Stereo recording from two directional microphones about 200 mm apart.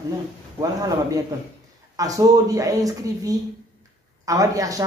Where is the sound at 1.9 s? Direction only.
15° right (ahead or behind).